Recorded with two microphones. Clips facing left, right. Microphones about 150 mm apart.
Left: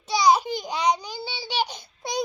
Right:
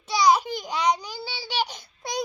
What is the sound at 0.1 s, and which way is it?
Babbling, centre (ahead or behind).